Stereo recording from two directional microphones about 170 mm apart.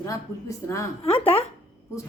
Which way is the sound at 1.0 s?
35° left (ahead or behind).